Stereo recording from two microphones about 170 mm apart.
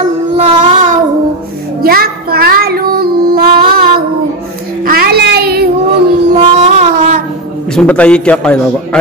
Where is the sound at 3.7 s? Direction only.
60° right (ahead or behind).